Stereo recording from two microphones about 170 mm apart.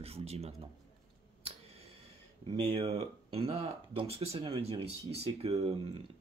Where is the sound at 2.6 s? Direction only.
35° right (ahead or behind).